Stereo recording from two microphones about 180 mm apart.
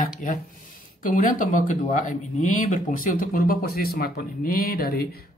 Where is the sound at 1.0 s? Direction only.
50° left (ahead or behind).